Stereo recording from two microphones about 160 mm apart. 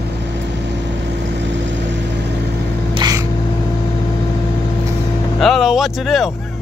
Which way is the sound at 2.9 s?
25° right (ahead or behind).